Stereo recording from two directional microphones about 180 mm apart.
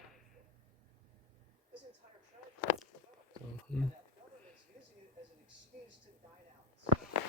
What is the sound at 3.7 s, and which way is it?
Speech, 5° left (ahead or behind).